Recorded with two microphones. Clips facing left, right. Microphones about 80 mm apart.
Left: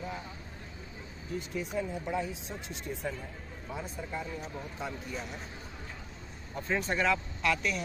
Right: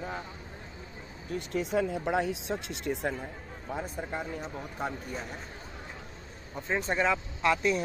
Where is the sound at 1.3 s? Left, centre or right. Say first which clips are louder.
Right 5 dB; right.